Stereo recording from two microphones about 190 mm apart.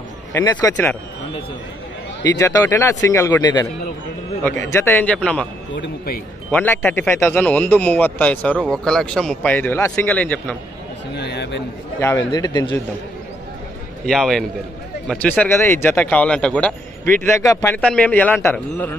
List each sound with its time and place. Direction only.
0.3 s speech: 15° left (ahead or behind)
2.2 s speech: 20° left (ahead or behind)
6.5 s speech: 10° left (ahead or behind)
11.1 s a man's voice: 60° left (ahead or behind)
12.0 s a man's voice: 15° left (ahead or behind)
14.0 s a man's voice: centre (ahead or behind)